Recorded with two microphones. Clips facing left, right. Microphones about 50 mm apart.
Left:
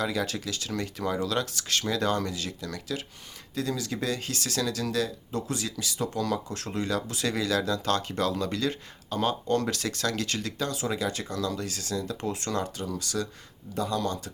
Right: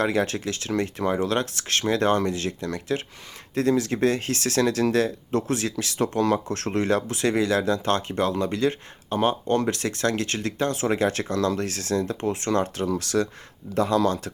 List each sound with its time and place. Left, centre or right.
0.0 s speech: right
12.7 s speech: right